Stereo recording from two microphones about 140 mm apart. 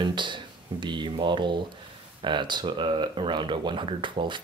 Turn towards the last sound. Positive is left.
turn(degrees=-35)  # may be behind; listen again after turning